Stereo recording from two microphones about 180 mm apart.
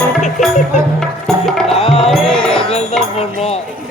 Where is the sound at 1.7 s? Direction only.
35° left (ahead or behind).